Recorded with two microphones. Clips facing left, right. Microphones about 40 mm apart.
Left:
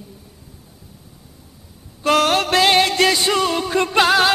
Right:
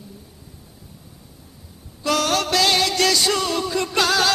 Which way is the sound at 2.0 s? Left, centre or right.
Left.